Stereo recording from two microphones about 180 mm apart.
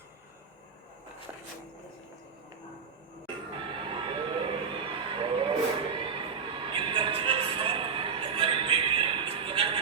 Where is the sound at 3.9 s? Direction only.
30° right (ahead or behind).